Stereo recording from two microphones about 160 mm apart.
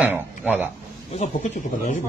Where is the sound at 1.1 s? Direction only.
50° left (ahead or behind).